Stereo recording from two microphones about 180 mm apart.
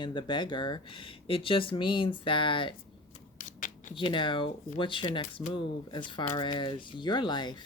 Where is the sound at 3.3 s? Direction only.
45° left (ahead or behind).